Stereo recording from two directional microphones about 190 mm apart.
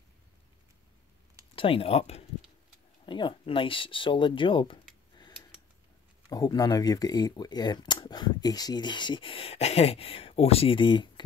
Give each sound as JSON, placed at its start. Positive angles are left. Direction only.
{"t": 1.5, "sound": "speech", "side_deg": 30}
{"t": 6.2, "sound": "speech", "side_deg": 20}